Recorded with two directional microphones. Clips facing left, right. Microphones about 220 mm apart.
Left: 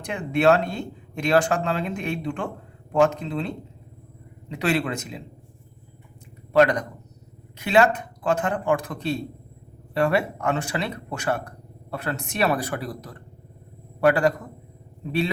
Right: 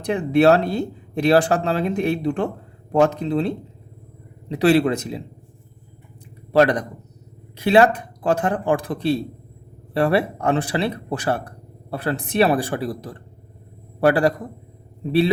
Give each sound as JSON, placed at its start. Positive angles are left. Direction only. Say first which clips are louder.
{"t": 0.0, "sound": "speech", "louder": "right 5 dB", "side_deg": -35}
{"t": 6.5, "sound": "speech", "louder": "right 2 dB", "side_deg": -35}